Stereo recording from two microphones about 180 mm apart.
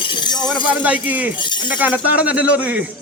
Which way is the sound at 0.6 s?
10° right (ahead or behind).